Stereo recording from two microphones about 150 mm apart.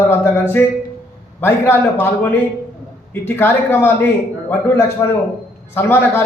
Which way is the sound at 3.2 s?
15° left (ahead or behind).